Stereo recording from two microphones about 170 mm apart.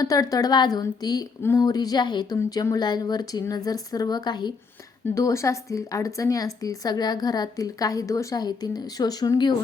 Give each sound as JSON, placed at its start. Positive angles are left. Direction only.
{"t": 0.0, "sound": "speech", "side_deg": 20}